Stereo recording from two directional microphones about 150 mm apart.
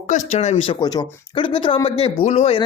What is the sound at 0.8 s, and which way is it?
Speech, 30° left (ahead or behind).